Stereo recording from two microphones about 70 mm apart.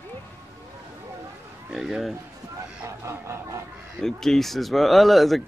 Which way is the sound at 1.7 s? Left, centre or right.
Centre.